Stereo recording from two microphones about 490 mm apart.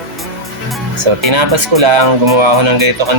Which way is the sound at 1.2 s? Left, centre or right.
Right.